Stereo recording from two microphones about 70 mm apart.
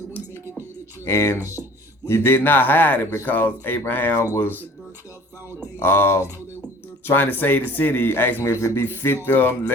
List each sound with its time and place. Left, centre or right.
1.0 s a man's voice: left
5.8 s a man's voice: left